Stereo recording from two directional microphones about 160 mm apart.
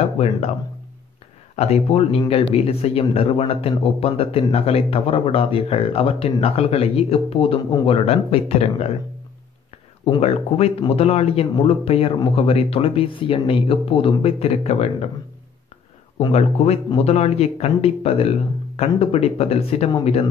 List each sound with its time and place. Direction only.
0.0 s a sound: 40° left (ahead or behind)
1.6 s speech: 40° left (ahead or behind)
10.0 s speech: 35° left (ahead or behind)
16.2 s speech: 40° left (ahead or behind)